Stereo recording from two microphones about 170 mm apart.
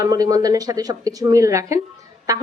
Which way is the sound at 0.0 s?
20° right (ahead or behind).